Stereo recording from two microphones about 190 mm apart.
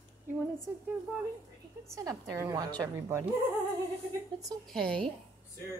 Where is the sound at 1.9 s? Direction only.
15° right (ahead or behind).